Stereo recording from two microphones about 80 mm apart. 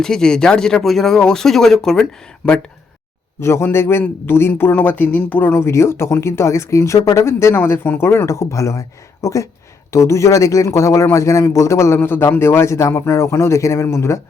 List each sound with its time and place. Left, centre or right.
0.0 s speech: centre
3.4 s speech: left